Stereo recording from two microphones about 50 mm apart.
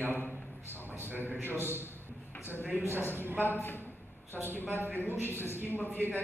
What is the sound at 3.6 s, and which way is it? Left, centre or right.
A woman's voice, left.